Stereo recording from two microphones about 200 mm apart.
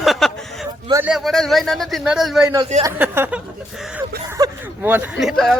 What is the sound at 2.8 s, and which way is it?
Speech, 10° right (ahead or behind).